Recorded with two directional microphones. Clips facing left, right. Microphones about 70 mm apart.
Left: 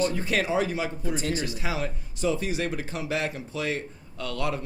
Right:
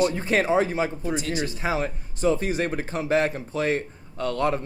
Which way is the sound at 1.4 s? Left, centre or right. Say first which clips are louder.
Right 4 dB; right.